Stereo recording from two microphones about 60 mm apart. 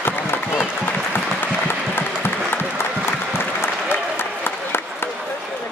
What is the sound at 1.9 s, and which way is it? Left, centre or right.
Applause, left.